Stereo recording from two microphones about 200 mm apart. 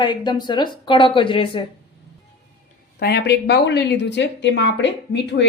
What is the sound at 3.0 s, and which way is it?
Speech, 55° left (ahead or behind).